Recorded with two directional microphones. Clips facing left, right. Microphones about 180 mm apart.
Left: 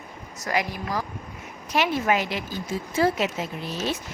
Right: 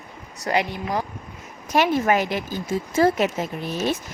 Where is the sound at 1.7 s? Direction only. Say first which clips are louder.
Right 4 dB; 45° right (ahead or behind).